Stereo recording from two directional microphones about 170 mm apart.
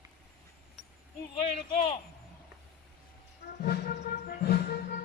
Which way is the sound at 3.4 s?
80° left.